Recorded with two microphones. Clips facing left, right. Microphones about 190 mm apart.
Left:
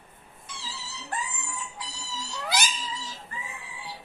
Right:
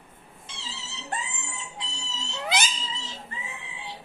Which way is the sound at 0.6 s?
25° right (ahead or behind).